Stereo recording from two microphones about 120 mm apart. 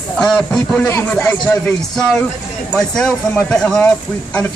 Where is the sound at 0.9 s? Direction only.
20° left (ahead or behind).